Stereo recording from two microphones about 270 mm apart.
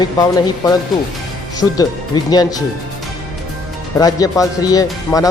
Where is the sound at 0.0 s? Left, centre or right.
Centre.